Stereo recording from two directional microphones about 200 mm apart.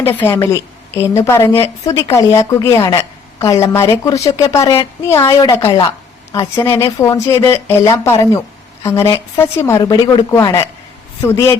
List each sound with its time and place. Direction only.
0.0 s a woman's voice: 10° left (ahead or behind)